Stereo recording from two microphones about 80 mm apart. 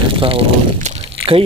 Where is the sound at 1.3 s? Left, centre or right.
Right.